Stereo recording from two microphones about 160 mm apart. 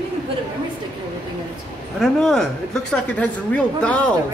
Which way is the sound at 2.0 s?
Centre (ahead or behind).